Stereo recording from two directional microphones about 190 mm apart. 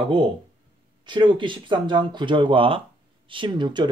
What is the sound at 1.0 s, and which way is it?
Speech, 25° right (ahead or behind).